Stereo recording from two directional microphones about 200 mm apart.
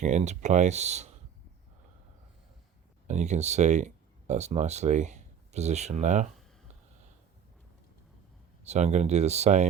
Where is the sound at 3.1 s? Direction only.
35° right (ahead or behind).